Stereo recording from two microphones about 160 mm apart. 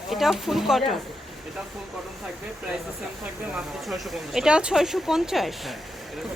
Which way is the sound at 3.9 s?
Centre (ahead or behind).